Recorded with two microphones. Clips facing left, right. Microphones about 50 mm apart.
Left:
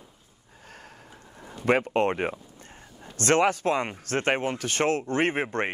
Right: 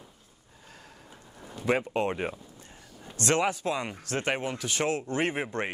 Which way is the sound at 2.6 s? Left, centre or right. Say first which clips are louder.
Left 2 dB; left.